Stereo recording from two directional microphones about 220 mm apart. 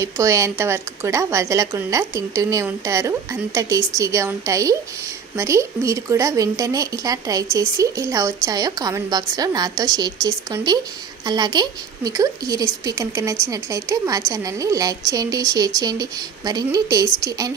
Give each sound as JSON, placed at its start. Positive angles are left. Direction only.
{"t": 0.0, "sound": "a woman's voice", "side_deg": -15}